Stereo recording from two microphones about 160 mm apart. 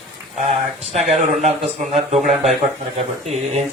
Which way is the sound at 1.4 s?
40° right (ahead or behind).